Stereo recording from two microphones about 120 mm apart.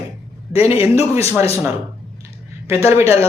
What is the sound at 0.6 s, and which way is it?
Speech, 20° right (ahead or behind).